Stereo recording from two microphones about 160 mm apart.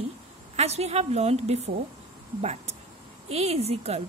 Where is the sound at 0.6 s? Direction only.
40° right (ahead or behind).